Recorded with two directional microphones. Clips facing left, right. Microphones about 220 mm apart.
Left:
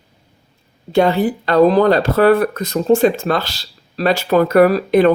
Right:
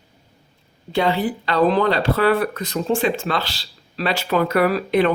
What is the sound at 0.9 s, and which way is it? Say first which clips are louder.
Speech: left 6 dB; 45° left (ahead or behind).